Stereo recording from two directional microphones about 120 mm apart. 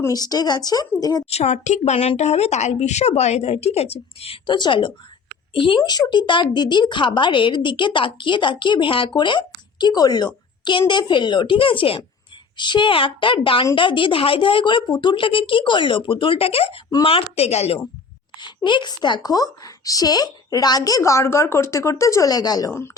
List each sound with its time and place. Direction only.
0.1 s speech: 35° left (ahead or behind)
1.3 s speech: 65° left (ahead or behind)
18.3 s speech: 40° left (ahead or behind)